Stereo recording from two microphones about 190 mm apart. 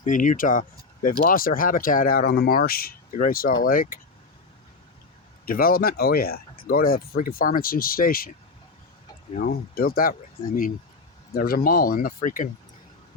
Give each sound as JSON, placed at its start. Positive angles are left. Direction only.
{"t": 0.0, "sound": "speech", "side_deg": 45}
{"t": 5.5, "sound": "speech", "side_deg": 50}
{"t": 9.4, "sound": "speech", "side_deg": 50}